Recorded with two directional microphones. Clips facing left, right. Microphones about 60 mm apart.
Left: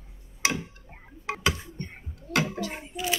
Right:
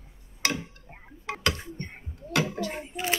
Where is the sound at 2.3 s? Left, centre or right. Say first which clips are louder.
Even; centre.